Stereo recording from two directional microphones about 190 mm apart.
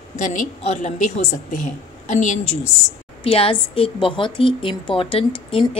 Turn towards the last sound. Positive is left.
turn(degrees=30)  # may be behind; listen again after turning